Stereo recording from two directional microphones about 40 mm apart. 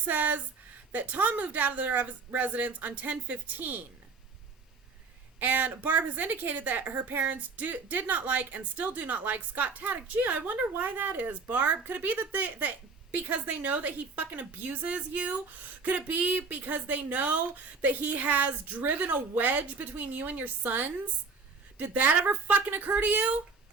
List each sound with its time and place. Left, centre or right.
0.0 s a woman's voice: right
5.4 s a woman's voice: right
7.2 s a woman's voice: right